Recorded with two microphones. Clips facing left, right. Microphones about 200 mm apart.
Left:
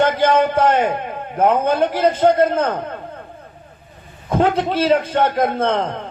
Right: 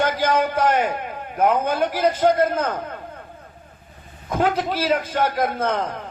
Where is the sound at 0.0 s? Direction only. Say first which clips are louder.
Left 5 dB; 25° left (ahead or behind).